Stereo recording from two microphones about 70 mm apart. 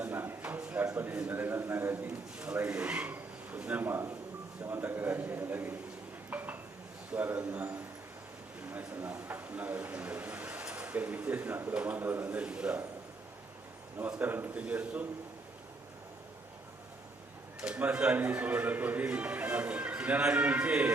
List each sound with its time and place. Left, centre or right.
0.0 s a sound: right
0.9 s speech: right
2.4 s speech: centre
6.3 s dishes: right
7.1 s speech: right
14.2 s speech: right
17.6 s a man's voice: centre